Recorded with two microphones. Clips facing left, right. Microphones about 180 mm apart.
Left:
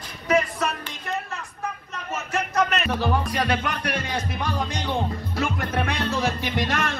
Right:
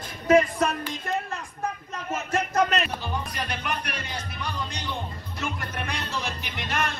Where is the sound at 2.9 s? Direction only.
70° left (ahead or behind).